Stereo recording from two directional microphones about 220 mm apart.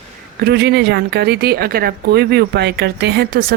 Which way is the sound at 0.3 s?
45° right (ahead or behind).